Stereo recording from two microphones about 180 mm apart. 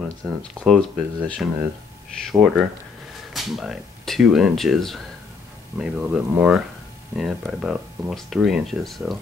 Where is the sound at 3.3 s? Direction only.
Centre (ahead or behind).